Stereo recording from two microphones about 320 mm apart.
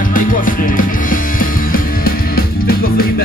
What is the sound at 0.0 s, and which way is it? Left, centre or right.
Music, left.